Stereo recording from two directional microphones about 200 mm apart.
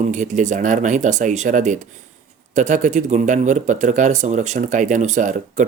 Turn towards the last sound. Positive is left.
turn(degrees=-40)  # may be behind; listen again after turning